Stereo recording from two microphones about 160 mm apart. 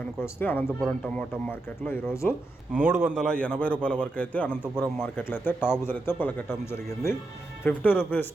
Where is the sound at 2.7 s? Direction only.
10° right (ahead or behind).